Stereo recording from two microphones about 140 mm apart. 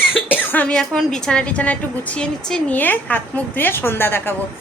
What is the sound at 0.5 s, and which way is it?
A woman's voice, 10° left (ahead or behind).